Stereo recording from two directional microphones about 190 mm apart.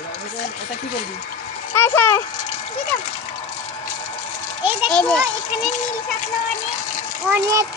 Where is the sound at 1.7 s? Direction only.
10° left (ahead or behind).